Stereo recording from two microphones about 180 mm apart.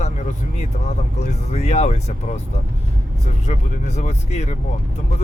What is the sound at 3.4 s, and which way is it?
Speech, 40° left (ahead or behind).